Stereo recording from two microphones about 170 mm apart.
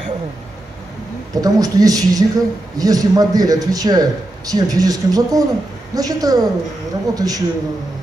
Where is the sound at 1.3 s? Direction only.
20° right (ahead or behind).